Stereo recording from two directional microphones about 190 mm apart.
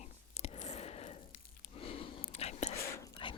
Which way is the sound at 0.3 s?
35° left (ahead or behind).